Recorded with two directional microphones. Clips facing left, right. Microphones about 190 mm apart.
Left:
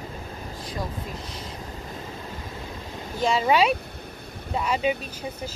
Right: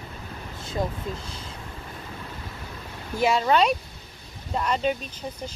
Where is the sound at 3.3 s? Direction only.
5° left (ahead or behind).